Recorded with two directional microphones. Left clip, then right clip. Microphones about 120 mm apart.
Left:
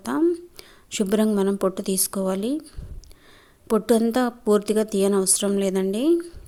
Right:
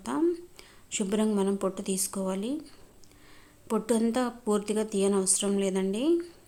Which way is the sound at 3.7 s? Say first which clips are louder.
Left 7 dB; 45° left (ahead or behind).